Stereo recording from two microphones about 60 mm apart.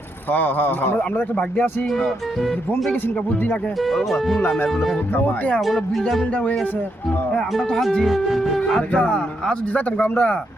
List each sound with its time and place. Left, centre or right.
0.3 s a man's voice: left
3.8 s speech: centre
5.1 s a man's voice: left
5.5 s speech: centre
8.0 s speech: centre
8.9 s speech: left
9.7 s speech: left